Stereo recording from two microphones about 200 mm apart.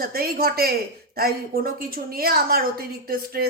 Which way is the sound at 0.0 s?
50° right (ahead or behind).